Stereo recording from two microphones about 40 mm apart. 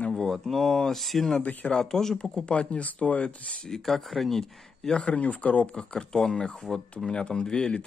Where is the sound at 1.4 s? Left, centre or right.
Left.